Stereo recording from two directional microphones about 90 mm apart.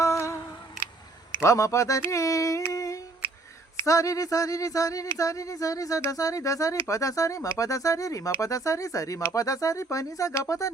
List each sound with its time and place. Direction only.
0.0 s humming: 35° left (ahead or behind)
0.8 s a sound: 20° right (ahead or behind)
1.4 s speech: 35° left (ahead or behind)
2.7 s humming: 40° left (ahead or behind)
3.8 s speech: 40° left (ahead or behind)